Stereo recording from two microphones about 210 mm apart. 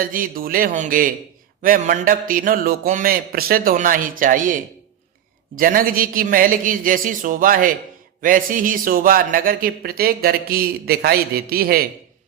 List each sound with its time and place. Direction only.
0.0 s mantra: 40° right (ahead or behind)
8.2 s speech: 40° right (ahead or behind)